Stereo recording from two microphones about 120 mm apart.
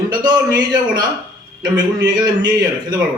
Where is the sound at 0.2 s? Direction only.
35° right (ahead or behind).